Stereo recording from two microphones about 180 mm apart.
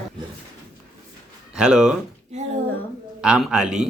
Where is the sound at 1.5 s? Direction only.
5° right (ahead or behind).